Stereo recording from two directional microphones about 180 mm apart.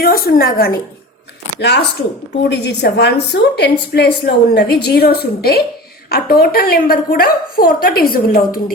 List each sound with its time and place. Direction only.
0.3 s a woman's voice: 55° left (ahead or behind)